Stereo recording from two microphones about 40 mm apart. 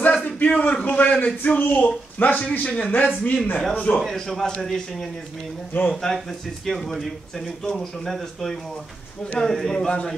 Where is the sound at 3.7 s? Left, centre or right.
Left.